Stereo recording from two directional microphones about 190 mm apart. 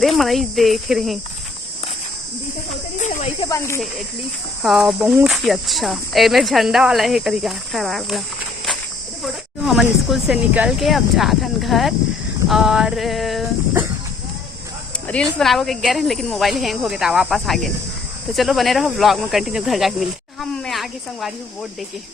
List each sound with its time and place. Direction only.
0.0 s speech: centre (ahead or behind)
3.0 s snake: 40° left (ahead or behind)
3.4 s speech: 15° left (ahead or behind)
4.6 s speech: centre (ahead or behind)
9.2 s speech: centre (ahead or behind)
15.0 s speech: 5° left (ahead or behind)